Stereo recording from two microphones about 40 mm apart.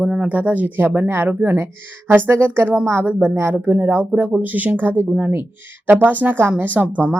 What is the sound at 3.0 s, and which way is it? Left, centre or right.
Speech, right.